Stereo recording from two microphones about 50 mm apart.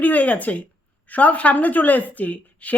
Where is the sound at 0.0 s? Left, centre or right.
Left.